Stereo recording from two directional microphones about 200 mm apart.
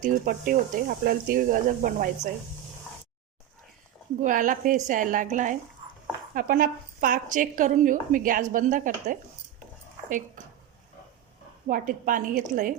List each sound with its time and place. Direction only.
0.0 s speech: 40° right (ahead or behind)
4.2 s a woman's voice: 40° right (ahead or behind)
11.7 s speech: 40° right (ahead or behind)